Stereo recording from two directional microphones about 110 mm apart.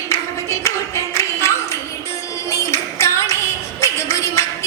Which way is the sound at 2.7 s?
25° left (ahead or behind).